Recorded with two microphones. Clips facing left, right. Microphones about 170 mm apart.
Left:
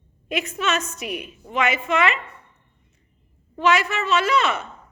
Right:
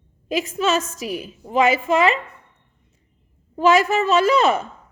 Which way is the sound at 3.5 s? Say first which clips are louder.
Right 5 dB; 35° right (ahead or behind).